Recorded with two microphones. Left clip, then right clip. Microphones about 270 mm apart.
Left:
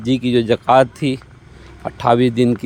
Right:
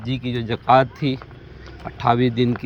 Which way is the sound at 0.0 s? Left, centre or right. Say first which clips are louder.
Left 10 dB; left.